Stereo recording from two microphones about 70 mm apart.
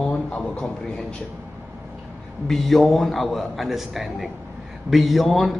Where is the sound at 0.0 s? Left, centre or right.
Centre.